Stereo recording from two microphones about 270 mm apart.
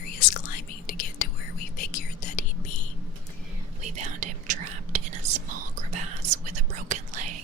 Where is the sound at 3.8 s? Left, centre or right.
Right.